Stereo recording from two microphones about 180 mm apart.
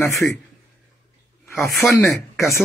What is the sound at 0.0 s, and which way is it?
Speech, 15° left (ahead or behind).